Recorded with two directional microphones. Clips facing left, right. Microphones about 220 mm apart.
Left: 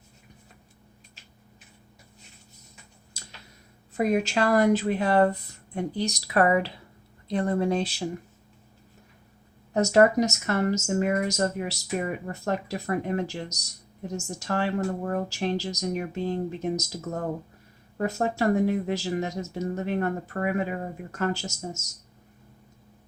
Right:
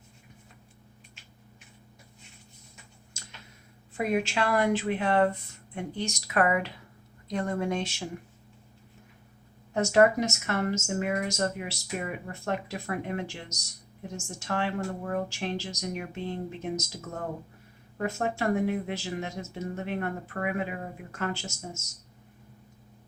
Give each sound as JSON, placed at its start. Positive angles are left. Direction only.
{"t": 3.1, "sound": "tick-tock", "side_deg": 35}
{"t": 3.9, "sound": "speech", "side_deg": 40}
{"t": 9.7, "sound": "speech", "side_deg": 40}